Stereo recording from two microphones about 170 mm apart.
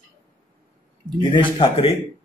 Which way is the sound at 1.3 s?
30° left (ahead or behind).